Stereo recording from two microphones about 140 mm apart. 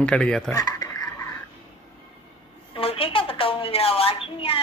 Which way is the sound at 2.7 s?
40° left (ahead or behind).